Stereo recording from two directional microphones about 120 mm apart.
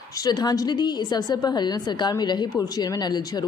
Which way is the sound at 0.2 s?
35° left (ahead or behind).